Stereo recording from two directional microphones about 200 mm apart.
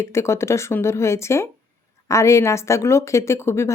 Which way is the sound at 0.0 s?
15° left (ahead or behind).